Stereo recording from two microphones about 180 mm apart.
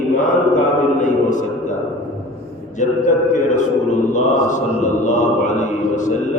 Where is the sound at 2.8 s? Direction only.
45° left (ahead or behind).